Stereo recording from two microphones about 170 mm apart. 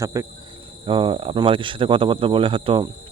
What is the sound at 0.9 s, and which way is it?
Cricket, 30° right (ahead or behind).